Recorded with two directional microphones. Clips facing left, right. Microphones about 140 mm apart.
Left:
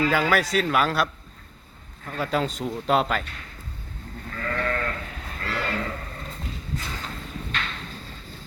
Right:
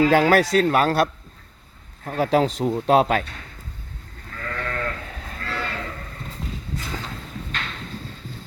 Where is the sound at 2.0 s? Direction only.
50° right (ahead or behind).